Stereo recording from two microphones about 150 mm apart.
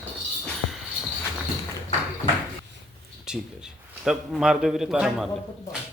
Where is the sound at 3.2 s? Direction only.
5° right (ahead or behind).